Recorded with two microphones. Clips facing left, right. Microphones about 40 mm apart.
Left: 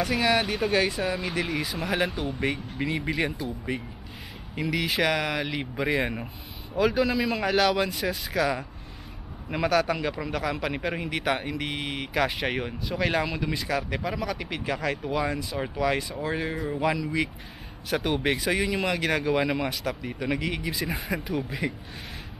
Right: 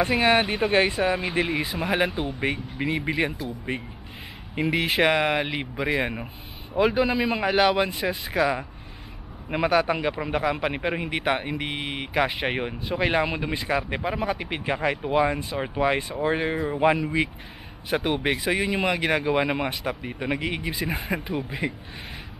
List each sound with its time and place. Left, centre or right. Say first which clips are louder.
0.0 s speech: right 4 dB; right; by 3.3 s centre
3.7 s speech: right 1 dB; right
5.8 s speech: right 1 dB; centre
6.7 s speech: right 2 dB; right
17.8 s speech: right 1 dB; centre